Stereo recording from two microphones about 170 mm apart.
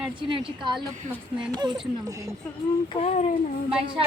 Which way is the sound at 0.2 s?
30° right (ahead or behind).